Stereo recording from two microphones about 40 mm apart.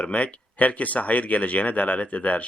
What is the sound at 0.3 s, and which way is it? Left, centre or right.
Speech, left.